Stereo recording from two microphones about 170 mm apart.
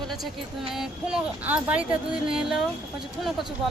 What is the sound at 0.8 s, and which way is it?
Speech, 5° right (ahead or behind).